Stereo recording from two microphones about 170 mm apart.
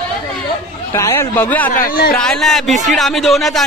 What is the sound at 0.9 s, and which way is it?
Speech, 15° left (ahead or behind).